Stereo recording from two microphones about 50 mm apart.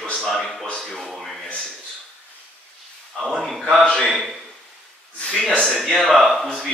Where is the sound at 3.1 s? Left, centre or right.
Centre.